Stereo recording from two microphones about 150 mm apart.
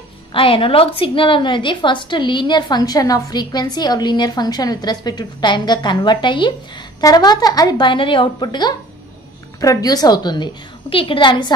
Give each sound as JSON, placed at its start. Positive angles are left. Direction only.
{"t": 0.3, "sound": "a woman's voice", "side_deg": 35}